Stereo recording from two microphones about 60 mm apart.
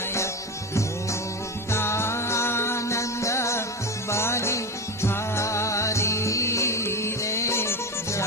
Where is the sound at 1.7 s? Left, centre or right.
Left.